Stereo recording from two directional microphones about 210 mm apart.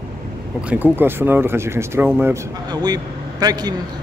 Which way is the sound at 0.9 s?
10° right (ahead or behind).